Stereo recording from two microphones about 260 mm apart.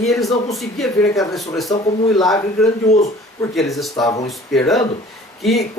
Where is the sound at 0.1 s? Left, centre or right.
Centre.